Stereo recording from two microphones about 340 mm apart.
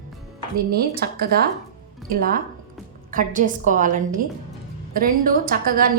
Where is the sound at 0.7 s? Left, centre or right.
Right.